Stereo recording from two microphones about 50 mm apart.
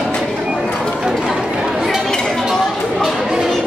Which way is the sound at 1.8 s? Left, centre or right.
Centre.